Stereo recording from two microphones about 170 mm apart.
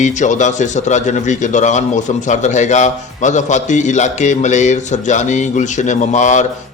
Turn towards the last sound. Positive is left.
turn(degrees=45)  # may be behind; listen again after turning